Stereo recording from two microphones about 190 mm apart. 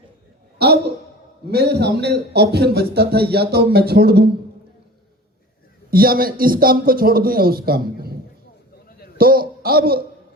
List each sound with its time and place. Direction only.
1.5 s speech: 60° right (ahead or behind)
5.9 s a man's voice: 50° right (ahead or behind)
9.1 s a man's voice: 50° right (ahead or behind)